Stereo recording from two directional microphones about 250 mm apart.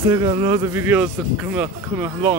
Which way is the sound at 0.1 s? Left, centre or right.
Centre.